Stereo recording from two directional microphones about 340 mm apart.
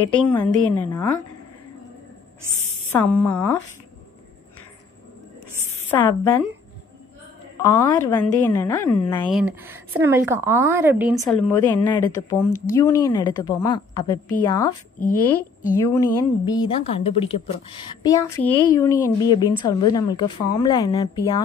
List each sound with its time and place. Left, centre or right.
0.3 s a woman's voice: centre
2.9 s a woman's voice: centre
5.9 s a woman's voice: centre
7.6 s a woman's voice: centre
9.3 s a woman's voice: centre
12.4 s speech: left
12.7 s a woman's voice: centre